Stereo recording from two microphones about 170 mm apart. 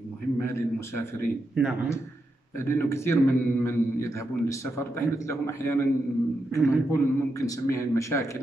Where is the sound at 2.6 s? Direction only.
15° left (ahead or behind).